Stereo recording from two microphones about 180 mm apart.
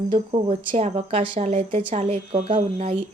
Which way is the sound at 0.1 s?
30° right (ahead or behind).